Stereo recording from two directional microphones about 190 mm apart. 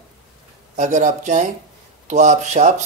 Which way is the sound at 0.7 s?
40° right (ahead or behind).